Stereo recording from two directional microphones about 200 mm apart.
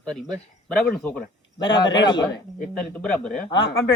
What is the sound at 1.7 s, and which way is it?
Speech, 20° left (ahead or behind).